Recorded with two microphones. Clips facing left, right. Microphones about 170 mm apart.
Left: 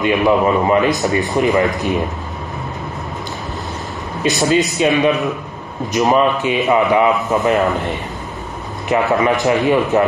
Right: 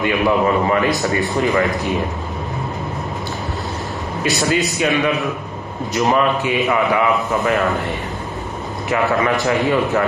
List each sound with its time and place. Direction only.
0.0 s a man's voice: 20° left (ahead or behind)
4.4 s a man's voice: 20° left (ahead or behind)